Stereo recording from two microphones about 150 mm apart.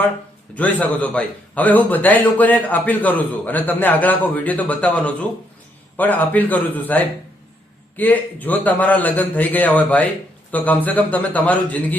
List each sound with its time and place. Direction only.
0.5 s a man's voice: 10° left (ahead or behind)